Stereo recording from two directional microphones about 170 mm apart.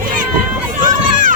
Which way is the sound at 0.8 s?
50° right (ahead or behind).